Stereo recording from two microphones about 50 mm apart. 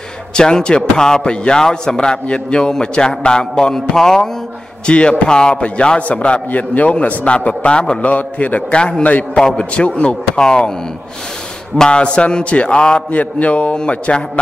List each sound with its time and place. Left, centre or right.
0.4 s a man's voice: centre
4.8 s a man's voice: left
8.1 s a man's voice: left
9.4 s a man's voice: centre
11.7 s a man's voice: centre